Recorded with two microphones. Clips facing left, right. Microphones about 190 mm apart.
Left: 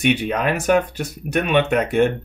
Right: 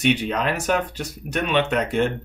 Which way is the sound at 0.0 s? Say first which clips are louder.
Left 2 dB; 55° left (ahead or behind).